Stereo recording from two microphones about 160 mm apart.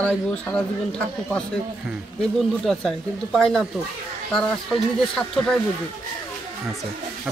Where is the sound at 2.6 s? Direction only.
5° left (ahead or behind).